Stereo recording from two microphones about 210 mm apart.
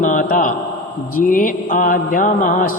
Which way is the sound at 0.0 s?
40° left (ahead or behind).